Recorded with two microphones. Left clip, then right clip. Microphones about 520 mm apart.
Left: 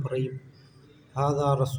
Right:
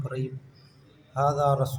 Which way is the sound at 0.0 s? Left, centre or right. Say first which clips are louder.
Left 4 dB; right.